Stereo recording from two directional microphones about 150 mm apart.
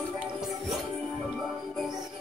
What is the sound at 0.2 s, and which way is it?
Music, centre (ahead or behind).